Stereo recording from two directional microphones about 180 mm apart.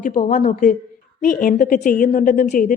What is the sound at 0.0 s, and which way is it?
A woman's voice, 50° left (ahead or behind).